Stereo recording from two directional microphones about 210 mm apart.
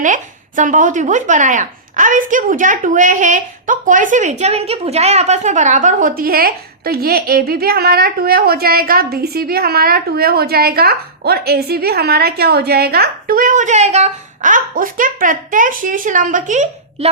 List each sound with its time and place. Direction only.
0.0 s speech: 35° right (ahead or behind)